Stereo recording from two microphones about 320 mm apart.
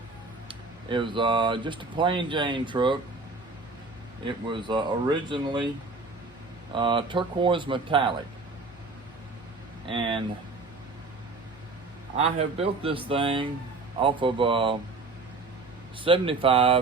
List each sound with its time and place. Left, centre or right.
0.9 s speech: centre
4.4 s speech: centre
6.7 s speech: centre
9.9 s speech: centre
12.1 s speech: centre
16.0 s speech: centre